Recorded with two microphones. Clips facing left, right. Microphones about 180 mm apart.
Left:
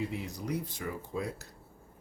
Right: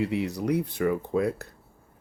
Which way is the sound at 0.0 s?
75° right (ahead or behind).